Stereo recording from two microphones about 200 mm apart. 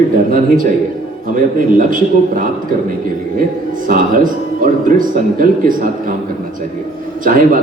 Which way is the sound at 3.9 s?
40° right (ahead or behind).